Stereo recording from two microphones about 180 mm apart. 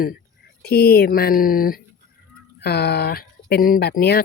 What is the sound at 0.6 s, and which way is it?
Speech, 60° left (ahead or behind).